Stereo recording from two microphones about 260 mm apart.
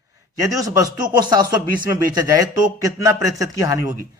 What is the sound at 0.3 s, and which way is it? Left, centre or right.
A man's voice, centre.